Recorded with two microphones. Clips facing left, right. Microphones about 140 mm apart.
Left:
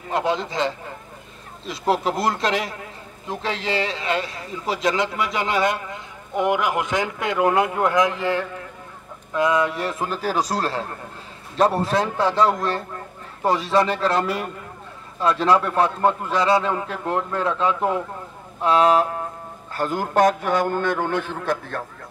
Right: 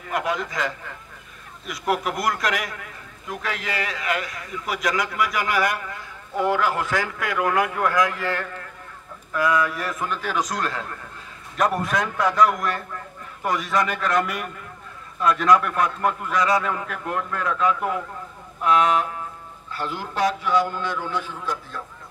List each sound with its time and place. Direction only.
0.1 s a man's voice: 25° left (ahead or behind)
19.7 s a man's voice: 45° left (ahead or behind); by 21.8 s 65° left (ahead or behind)